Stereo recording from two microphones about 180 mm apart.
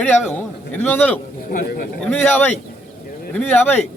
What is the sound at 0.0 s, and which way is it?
Speech, 10° left (ahead or behind).